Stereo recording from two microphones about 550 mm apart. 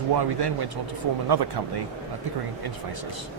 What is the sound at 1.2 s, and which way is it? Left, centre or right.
Speech, right.